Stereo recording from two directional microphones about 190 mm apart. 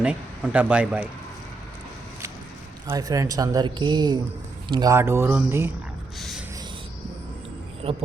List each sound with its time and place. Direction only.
0.0 s speech: 5° right (ahead or behind)
2.8 s speech: 20° right (ahead or behind)
6.1 s a sound: centre (ahead or behind)
7.8 s speech: 30° right (ahead or behind)